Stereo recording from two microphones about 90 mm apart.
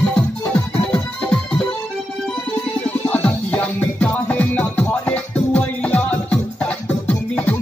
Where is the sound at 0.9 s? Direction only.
10° left (ahead or behind).